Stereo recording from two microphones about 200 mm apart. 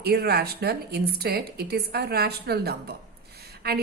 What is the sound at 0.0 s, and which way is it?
A woman's voice, 50° right (ahead or behind).